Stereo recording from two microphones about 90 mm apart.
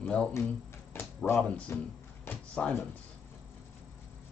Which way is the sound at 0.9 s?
25° left (ahead or behind).